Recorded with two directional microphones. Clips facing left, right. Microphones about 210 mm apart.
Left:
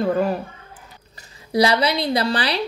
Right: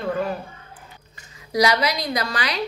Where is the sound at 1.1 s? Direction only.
35° left (ahead or behind).